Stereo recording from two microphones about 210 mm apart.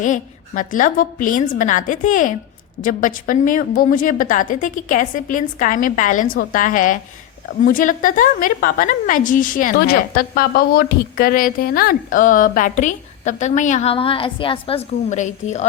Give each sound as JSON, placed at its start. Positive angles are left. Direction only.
{"t": 0.0, "sound": "a woman's voice", "side_deg": 40}